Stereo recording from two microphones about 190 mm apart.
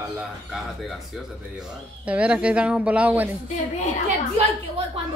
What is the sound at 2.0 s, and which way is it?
A woman's voice, 5° right (ahead or behind).